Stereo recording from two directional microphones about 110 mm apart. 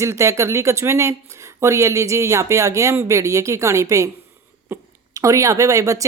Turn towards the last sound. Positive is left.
turn(degrees=-30)  # may be behind; listen again after turning